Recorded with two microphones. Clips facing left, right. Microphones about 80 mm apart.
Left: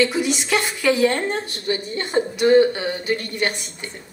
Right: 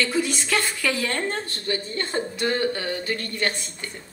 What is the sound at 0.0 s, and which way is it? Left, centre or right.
A woman's voice, centre.